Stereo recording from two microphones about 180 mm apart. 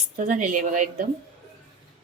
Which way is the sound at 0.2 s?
45° right (ahead or behind).